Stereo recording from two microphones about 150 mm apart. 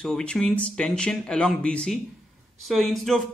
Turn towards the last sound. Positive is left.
turn(degrees=0)  # may be behind; listen again after turning